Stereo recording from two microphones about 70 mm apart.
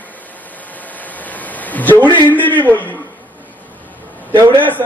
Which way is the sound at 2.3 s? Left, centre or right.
Left.